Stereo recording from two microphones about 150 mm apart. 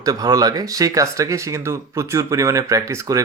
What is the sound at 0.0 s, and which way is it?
Speech, 25° right (ahead or behind).